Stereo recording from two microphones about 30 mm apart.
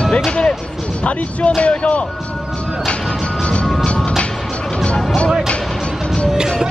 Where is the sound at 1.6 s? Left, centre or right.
Left.